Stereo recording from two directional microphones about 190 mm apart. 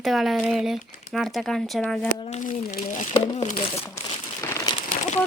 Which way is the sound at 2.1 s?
40° left (ahead or behind).